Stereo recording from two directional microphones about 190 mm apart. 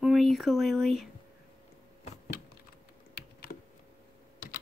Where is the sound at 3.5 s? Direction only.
55° left (ahead or behind).